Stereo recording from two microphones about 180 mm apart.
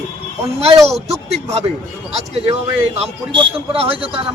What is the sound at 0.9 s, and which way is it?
Speech, 35° right (ahead or behind).